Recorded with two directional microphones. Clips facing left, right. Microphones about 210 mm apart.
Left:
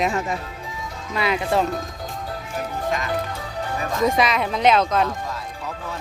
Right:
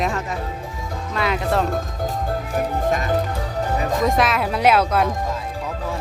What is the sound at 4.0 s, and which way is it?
Speech, centre (ahead or behind).